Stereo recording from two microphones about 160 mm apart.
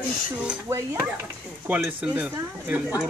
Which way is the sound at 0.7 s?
20° right (ahead or behind).